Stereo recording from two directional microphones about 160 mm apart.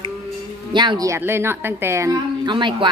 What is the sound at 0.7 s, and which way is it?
A woman's voice, 25° right (ahead or behind).